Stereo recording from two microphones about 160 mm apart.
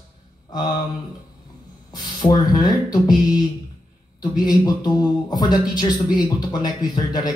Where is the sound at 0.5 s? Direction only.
25° left (ahead or behind).